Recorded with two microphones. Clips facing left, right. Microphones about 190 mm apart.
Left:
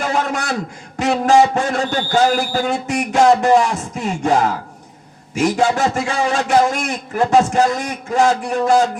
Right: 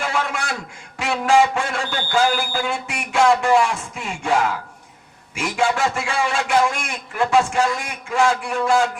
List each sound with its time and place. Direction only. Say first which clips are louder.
0.0 s speech: left 4 dB; 40° left (ahead or behind)